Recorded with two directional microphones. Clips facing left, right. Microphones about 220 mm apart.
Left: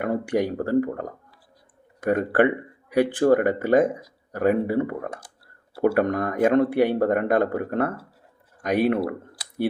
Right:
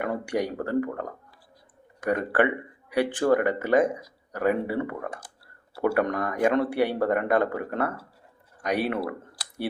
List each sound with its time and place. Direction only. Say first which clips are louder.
0.0 s speech: left 4 dB; 45° left (ahead or behind)